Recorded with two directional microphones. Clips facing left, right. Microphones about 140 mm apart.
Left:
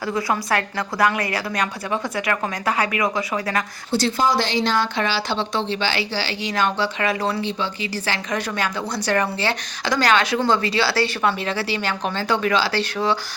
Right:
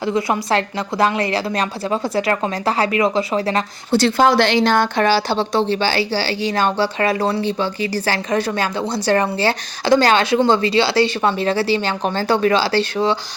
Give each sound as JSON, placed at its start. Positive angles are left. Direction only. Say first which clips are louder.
{"t": 0.0, "sound": "a woman's voice", "louder": "right 4 dB", "side_deg": -25}
{"t": 3.9, "sound": "a woman's voice", "louder": "right 6 dB", "side_deg": -70}
{"t": 11.3, "sound": "a woman's voice", "louder": "right 6 dB", "side_deg": -35}